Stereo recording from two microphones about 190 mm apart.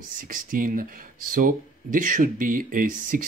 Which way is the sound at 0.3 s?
45° right (ahead or behind).